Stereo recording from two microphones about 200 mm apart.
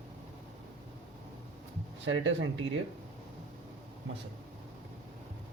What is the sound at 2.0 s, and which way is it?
Speech, 70° right (ahead or behind).